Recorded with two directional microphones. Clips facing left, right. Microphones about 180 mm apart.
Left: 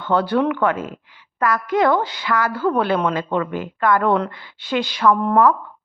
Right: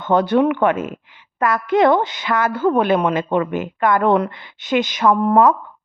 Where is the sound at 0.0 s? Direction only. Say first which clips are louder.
Right 3 dB; 20° right (ahead or behind).